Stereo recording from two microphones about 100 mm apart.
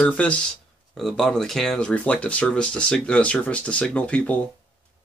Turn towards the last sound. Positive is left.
turn(degrees=10)  # may be behind; listen again after turning